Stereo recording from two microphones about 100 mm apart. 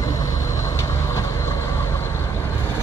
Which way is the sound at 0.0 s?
35° left (ahead or behind).